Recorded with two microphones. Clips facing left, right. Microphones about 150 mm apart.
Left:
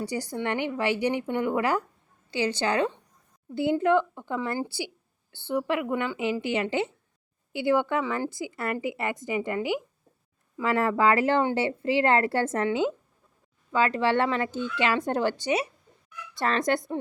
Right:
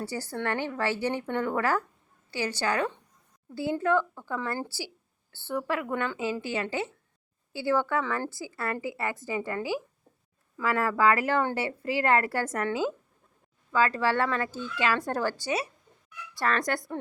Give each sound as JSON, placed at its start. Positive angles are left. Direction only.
{"t": 0.0, "sound": "a woman's voice", "side_deg": 15}